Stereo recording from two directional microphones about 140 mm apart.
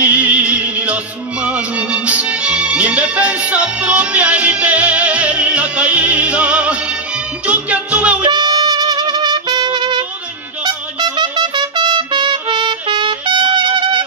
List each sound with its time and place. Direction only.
0.0 s music: 10° right (ahead or behind)
8.3 s music: 30° right (ahead or behind)
10.6 s trumpet: 30° right (ahead or behind)